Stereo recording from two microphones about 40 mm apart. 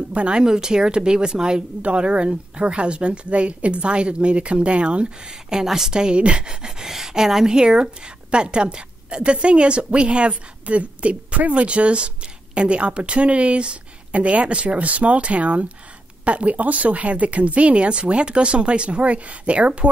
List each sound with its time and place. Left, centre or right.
0.1 s speech: right
5.9 s speech: right